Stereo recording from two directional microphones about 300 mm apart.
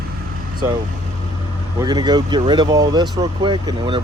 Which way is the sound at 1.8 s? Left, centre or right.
Centre.